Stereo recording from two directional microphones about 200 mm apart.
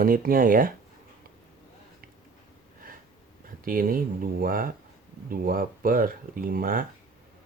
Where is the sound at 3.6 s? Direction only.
45° right (ahead or behind).